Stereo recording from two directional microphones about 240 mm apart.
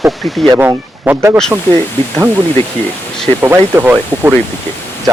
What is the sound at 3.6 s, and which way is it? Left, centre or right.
Speech, centre.